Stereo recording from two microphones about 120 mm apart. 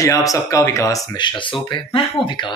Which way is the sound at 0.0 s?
30° left (ahead or behind).